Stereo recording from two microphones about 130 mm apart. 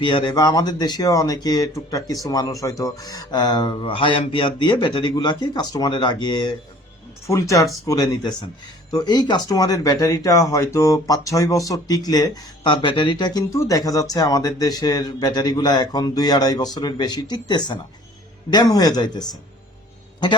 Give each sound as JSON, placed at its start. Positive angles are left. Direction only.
{"t": 0.0, "sound": "speech", "side_deg": 40}
{"t": 7.3, "sound": "speech", "side_deg": 25}